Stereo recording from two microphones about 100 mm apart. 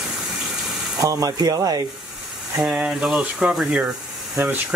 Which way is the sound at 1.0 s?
35° right (ahead or behind).